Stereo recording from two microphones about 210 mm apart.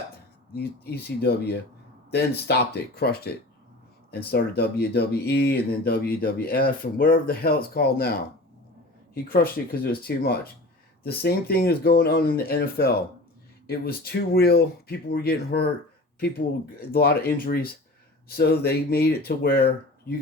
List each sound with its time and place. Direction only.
0.5 s speech: 50° left (ahead or behind)
16.9 s speech: 45° left (ahead or behind)